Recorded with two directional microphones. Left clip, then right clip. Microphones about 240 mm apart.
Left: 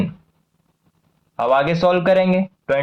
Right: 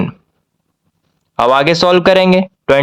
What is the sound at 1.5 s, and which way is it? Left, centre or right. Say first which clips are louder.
Speech: right 5 dB; right.